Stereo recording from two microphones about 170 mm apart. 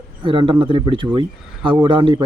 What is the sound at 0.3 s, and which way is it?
Speech, 30° right (ahead or behind).